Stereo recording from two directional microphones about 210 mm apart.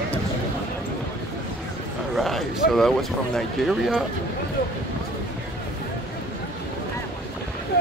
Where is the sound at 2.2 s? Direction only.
Centre (ahead or behind).